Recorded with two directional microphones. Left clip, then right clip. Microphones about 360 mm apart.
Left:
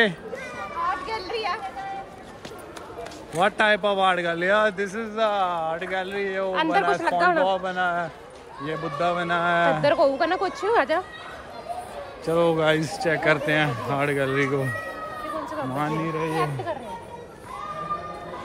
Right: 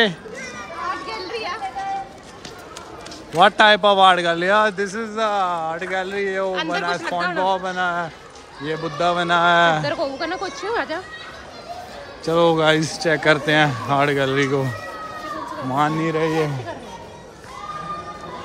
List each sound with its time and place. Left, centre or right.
1.3 s a sound: left
3.3 s a man's voice: centre
6.5 s speech: centre
7.4 s a man's voice: centre
10.0 s speech: left
12.3 s a man's voice: centre
15.7 s a man's voice: centre